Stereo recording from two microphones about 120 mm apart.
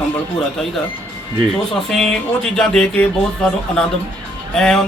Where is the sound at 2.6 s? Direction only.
5° left (ahead or behind).